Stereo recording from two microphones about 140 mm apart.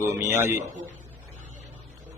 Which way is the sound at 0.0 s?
15° right (ahead or behind).